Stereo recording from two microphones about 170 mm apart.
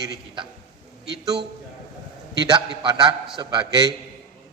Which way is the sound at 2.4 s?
25° right (ahead or behind).